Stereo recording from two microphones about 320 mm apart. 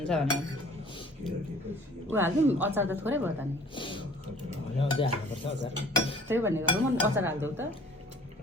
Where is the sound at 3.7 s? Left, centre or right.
Centre.